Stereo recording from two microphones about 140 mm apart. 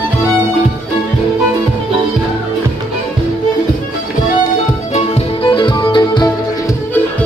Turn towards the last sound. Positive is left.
turn(degrees=30)  # may be behind; listen again after turning